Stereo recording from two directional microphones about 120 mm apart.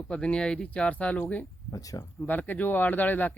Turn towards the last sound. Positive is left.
turn(degrees=15)  # may be behind; listen again after turning